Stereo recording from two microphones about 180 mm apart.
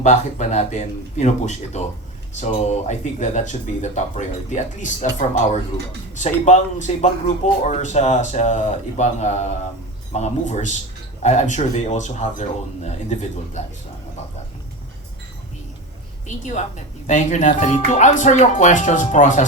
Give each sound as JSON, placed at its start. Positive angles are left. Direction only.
{"t": 0.0, "sound": "speech", "side_deg": 40}
{"t": 16.2, "sound": "speech", "side_deg": 40}